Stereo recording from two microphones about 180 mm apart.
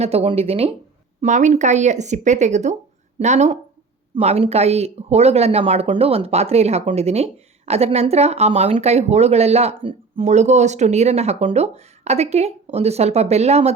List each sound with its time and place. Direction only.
0.0 s speech: 35° right (ahead or behind)